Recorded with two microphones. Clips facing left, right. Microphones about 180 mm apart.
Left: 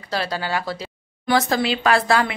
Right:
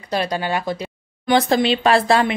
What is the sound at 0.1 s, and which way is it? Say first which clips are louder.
Speech: right 3 dB; 20° right (ahead or behind).